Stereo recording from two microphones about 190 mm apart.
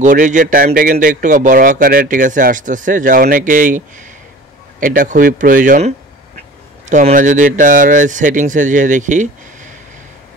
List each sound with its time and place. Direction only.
0.0 s speech: 40° right (ahead or behind)